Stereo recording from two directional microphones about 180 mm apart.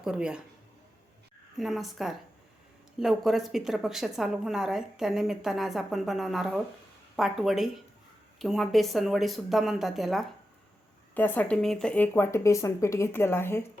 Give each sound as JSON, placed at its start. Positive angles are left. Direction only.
{"t": 0.0, "sound": "a woman's voice", "side_deg": -5}
{"t": 1.5, "sound": "a woman's voice", "side_deg": 0}